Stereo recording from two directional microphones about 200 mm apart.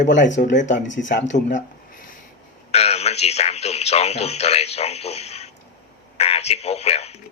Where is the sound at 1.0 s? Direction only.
50° left (ahead or behind).